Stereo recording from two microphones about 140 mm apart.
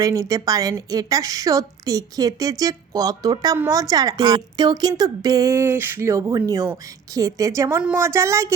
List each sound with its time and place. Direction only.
0.0 s a woman's voice: 25° right (ahead or behind)